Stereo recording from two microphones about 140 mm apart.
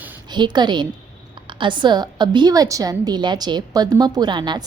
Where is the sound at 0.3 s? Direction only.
30° right (ahead or behind).